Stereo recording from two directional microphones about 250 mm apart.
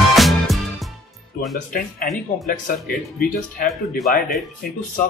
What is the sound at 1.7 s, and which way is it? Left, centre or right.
Speech, left.